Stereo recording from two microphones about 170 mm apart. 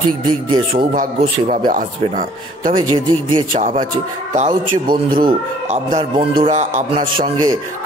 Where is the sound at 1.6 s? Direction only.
50° right (ahead or behind).